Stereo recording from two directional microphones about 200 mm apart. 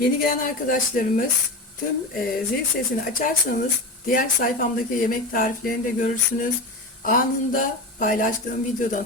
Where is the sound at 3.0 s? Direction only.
45° left (ahead or behind).